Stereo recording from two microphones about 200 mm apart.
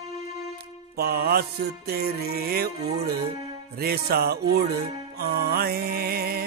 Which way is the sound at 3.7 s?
50° right (ahead or behind).